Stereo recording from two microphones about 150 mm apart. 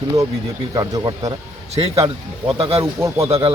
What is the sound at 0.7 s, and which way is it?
Speech, 25° right (ahead or behind).